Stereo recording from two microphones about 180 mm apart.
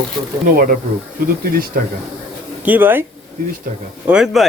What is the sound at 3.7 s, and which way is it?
Speech, 50° right (ahead or behind).